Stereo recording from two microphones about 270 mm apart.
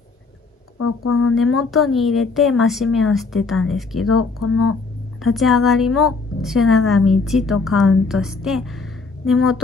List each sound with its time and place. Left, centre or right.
0.7 s speech: left
1.3 s speech: centre
4.1 s speech: left
5.2 s a woman's voice: centre